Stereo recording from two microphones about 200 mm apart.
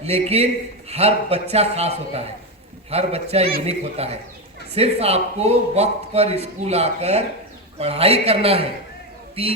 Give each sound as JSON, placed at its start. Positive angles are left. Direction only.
{"t": 0.0, "sound": "a man's voice", "side_deg": -30}